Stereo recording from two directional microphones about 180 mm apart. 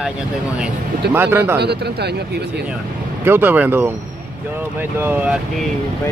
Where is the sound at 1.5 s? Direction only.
65° right (ahead or behind).